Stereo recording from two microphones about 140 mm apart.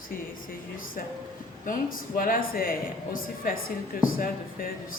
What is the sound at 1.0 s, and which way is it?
Speech, 85° left.